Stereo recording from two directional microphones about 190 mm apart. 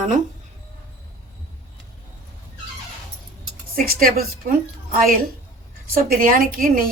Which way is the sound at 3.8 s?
50° right (ahead or behind).